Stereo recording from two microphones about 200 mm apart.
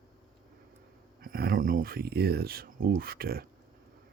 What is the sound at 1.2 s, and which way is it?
Speech, 50° right (ahead or behind).